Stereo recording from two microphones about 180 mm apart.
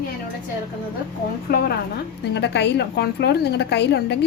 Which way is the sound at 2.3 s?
70° left (ahead or behind).